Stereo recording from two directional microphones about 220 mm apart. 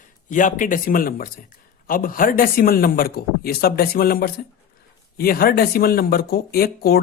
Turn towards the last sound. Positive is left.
turn(degrees=45)  # may be behind; listen again after turning